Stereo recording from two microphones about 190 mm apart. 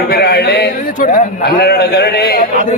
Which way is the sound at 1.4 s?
60° left (ahead or behind).